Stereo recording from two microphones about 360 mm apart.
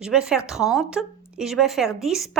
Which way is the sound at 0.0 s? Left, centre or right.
Centre.